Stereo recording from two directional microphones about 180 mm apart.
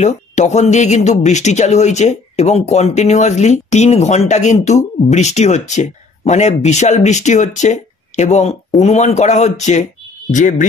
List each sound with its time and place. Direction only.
0.0 s speech: 40° left (ahead or behind)